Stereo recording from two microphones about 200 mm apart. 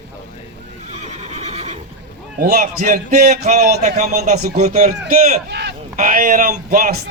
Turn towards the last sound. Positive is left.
turn(degrees=-40)  # may be behind; listen again after turning